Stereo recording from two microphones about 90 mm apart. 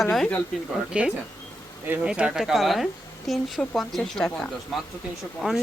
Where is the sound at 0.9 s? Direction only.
15° right (ahead or behind); by 4.3 s 5° left (ahead or behind).